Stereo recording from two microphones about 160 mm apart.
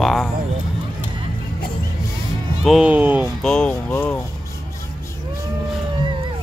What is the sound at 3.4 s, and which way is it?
Speech, 5° left (ahead or behind).